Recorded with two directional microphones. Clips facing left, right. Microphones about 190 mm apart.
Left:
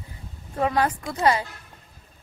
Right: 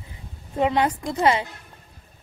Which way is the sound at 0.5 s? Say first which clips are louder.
Right 2 dB; 20° right (ahead or behind).